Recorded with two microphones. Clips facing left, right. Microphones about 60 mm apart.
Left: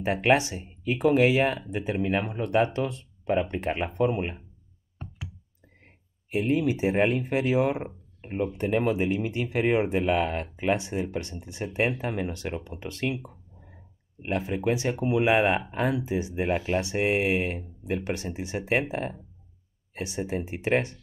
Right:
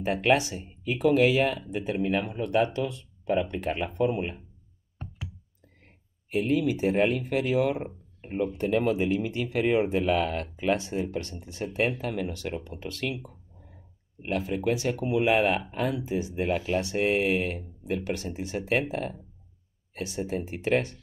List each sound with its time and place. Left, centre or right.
0.0 s speech: left
5.9 s speech: left